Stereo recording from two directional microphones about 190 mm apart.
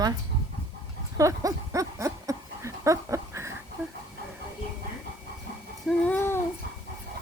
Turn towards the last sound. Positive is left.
turn(degrees=10)  # may be behind; listen again after turning